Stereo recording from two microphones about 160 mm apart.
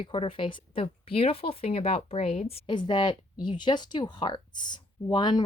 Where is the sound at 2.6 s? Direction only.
30° left (ahead or behind).